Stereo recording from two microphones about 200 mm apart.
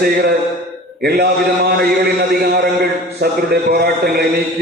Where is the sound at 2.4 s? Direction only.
50° right (ahead or behind).